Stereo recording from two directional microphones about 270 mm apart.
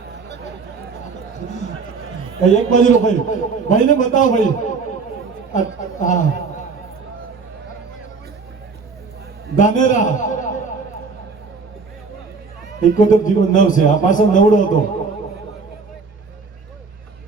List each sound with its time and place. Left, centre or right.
2.5 s a man's voice: left
9.6 s a man's voice: left
12.8 s a man's voice: left